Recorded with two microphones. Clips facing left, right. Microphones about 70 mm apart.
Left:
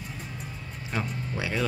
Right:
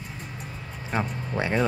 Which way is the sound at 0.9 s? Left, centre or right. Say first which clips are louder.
Right 4 dB; right.